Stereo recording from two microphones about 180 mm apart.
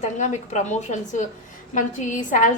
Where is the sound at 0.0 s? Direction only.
40° left (ahead or behind).